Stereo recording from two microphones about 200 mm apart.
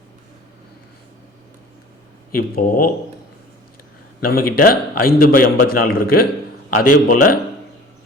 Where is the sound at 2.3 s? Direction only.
45° left (ahead or behind).